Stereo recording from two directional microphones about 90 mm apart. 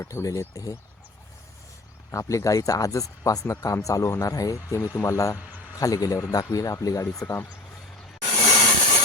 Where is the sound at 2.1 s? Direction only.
35° left (ahead or behind).